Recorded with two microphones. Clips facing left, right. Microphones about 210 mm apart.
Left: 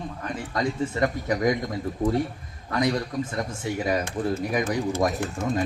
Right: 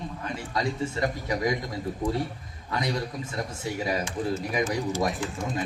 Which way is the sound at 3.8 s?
55° left (ahead or behind).